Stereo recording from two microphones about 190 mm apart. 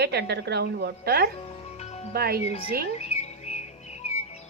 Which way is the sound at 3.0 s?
35° left (ahead or behind).